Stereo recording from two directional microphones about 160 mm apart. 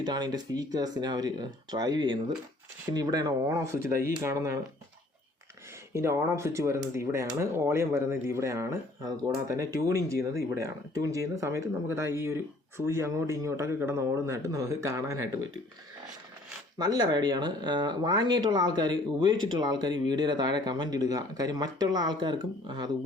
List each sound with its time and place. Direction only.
0.0 s speech: 25° right (ahead or behind)
5.9 s speech: 15° right (ahead or behind)
16.7 s speech: 25° right (ahead or behind)